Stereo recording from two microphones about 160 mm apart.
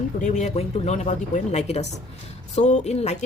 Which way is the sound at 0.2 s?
45° left (ahead or behind).